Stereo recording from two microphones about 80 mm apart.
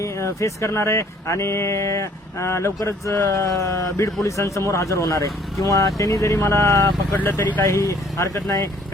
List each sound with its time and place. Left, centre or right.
0.0 s speech: left
7.3 s speech: left
7.7 s speech: left